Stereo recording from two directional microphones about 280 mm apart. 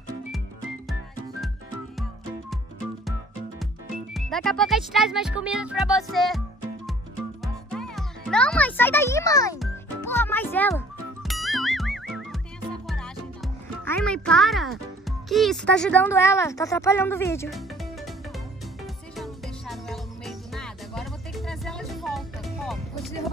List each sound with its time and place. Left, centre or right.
4.1 s speech: centre
7.4 s music: centre
12.8 s a child's voice: centre
19.1 s music: centre